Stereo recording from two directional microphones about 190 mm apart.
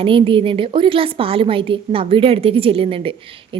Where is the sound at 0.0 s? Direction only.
25° right (ahead or behind).